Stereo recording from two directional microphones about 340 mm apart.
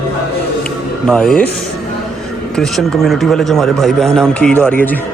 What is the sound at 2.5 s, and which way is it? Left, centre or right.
Speech, centre.